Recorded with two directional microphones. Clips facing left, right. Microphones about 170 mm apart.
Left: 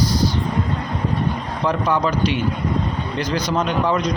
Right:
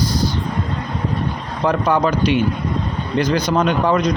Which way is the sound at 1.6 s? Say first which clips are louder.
Right 3 dB; 55° right (ahead or behind).